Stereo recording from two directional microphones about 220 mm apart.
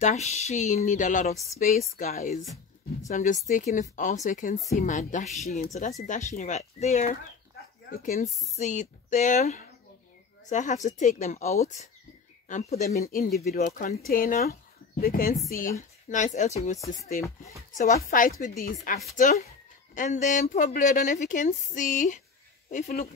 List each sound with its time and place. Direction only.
0.0 s speech: 30° left (ahead or behind)
16.3 s speech: 30° left (ahead or behind)